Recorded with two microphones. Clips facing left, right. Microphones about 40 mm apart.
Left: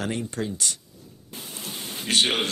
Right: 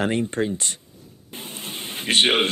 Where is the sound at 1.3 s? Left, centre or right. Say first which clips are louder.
Right 3 dB; right.